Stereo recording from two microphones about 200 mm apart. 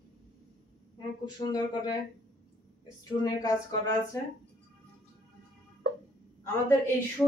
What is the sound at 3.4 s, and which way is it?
Speech, 15° left (ahead or behind).